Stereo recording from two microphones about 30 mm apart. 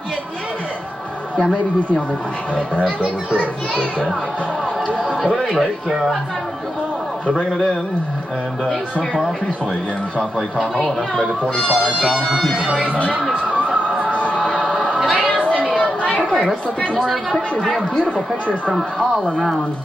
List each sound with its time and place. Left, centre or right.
5.2 s speech: centre
11.6 s speech: right
12.0 s speech: right
12.4 s speech: centre
12.8 s speech: left
15.0 s a sound: centre
15.6 s chatter: left
17.0 s speech: centre